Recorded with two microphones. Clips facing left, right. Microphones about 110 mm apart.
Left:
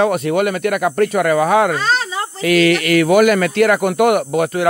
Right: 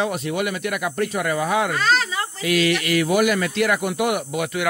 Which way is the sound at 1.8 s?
25° left (ahead or behind).